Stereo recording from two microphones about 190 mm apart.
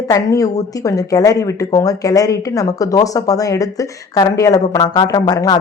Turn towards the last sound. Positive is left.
turn(degrees=20)  # may be behind; listen again after turning